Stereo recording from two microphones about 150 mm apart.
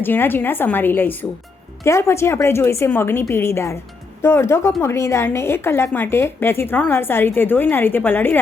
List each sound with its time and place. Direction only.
0.0 s a woman's voice: 15° left (ahead or behind)